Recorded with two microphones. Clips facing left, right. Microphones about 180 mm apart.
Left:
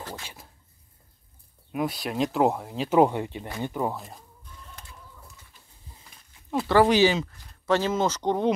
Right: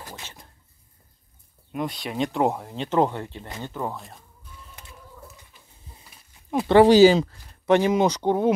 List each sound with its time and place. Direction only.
0.0 s a sound: 20° right (ahead or behind)
1.7 s speech: 5° left (ahead or behind)
3.9 s speech: centre (ahead or behind)
5.9 s a sound: 15° right (ahead or behind)
6.9 s speech: 35° right (ahead or behind)
7.6 s speech: 15° right (ahead or behind)